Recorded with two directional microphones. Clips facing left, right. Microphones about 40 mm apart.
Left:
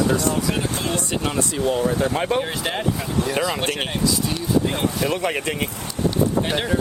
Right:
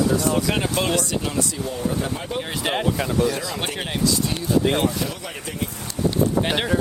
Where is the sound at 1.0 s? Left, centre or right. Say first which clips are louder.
Left 1 dB; left.